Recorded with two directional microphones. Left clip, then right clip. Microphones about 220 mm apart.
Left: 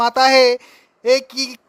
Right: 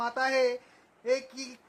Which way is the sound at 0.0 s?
45° left (ahead or behind).